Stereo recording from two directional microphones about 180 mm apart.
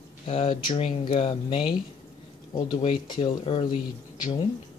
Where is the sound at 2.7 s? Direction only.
25° left (ahead or behind).